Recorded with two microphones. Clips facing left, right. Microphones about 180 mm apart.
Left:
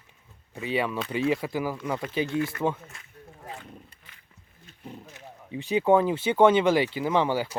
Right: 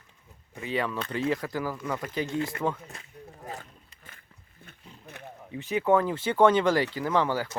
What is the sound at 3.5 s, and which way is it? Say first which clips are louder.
Wild animals: left 2 dB; 45° right (ahead or behind).